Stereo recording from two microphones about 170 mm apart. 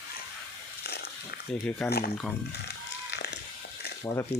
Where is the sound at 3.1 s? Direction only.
85° left.